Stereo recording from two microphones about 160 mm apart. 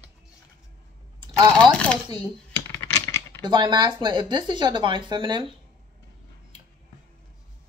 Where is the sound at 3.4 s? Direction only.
25° right (ahead or behind).